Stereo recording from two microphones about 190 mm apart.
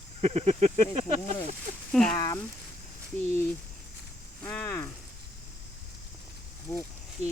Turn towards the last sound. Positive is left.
turn(degrees=15)  # may be behind; listen again after turning